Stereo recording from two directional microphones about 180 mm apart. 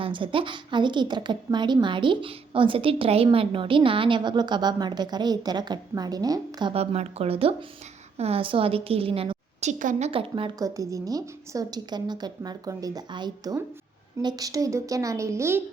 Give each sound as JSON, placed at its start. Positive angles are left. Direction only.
{"t": 0.0, "sound": "a woman's voice", "side_deg": -30}
{"t": 10.1, "sound": "a woman's voice", "side_deg": -30}
{"t": 10.8, "sound": "a woman's voice", "side_deg": -20}